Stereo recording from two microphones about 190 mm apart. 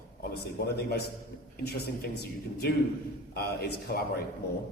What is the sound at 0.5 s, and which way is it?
A man's voice, 55° left (ahead or behind).